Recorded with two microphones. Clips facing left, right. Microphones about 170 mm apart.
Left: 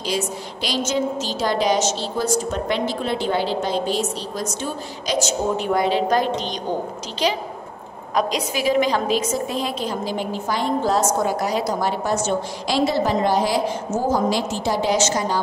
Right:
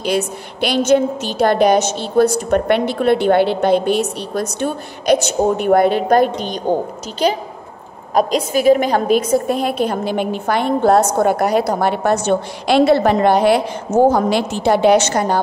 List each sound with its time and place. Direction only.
0.0 s a woman's voice: 60° right (ahead or behind)
8.1 s a woman's voice: 50° right (ahead or behind)